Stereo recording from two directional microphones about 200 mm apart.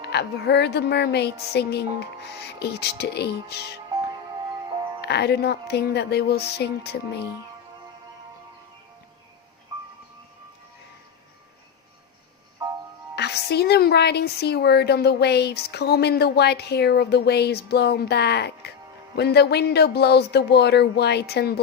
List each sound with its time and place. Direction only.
0.0 s a woman's voice: 55° left (ahead or behind)
5.0 s a woman's voice: 55° left (ahead or behind)
13.1 s a woman's voice: 55° left (ahead or behind)